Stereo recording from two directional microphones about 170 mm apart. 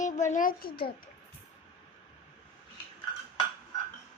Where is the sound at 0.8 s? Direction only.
60° left (ahead or behind).